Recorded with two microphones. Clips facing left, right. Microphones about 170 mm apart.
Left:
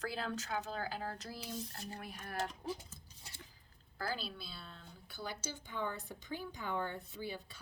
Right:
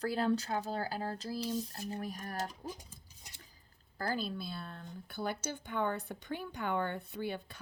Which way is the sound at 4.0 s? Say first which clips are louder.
Right 5 dB; 45° right (ahead or behind).